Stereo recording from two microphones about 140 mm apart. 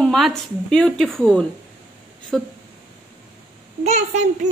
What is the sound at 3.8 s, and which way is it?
Speech, 60° right (ahead or behind).